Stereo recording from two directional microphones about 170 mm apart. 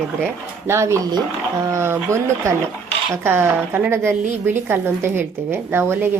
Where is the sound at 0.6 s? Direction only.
15° right (ahead or behind).